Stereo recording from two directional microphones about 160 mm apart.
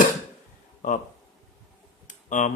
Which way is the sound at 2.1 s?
50° left (ahead or behind).